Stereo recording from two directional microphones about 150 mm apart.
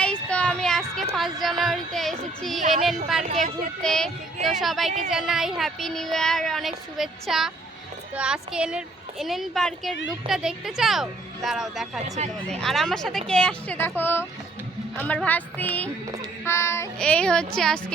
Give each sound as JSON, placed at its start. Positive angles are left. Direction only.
{"t": 0.0, "sound": "child singing", "side_deg": 10}
{"t": 1.1, "sound": "a woman's voice", "side_deg": 0}
{"t": 17.0, "sound": "a woman's voice", "side_deg": 5}